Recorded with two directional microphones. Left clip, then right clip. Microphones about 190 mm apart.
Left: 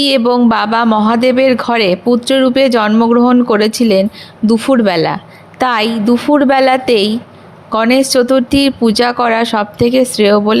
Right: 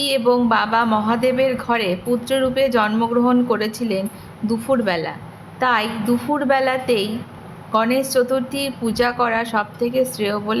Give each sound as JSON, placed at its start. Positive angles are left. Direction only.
{"t": 0.0, "sound": "speech", "side_deg": 40}